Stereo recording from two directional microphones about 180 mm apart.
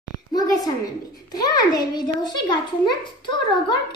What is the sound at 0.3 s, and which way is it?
A child's voice, 20° left (ahead or behind).